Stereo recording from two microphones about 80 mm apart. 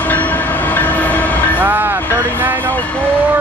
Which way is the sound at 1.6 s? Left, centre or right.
Right.